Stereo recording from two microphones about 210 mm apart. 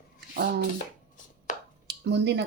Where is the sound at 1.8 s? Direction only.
55° right (ahead or behind).